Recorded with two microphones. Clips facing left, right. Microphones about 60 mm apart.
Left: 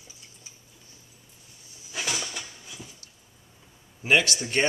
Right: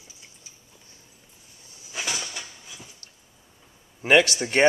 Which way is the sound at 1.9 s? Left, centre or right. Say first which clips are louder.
Even; centre.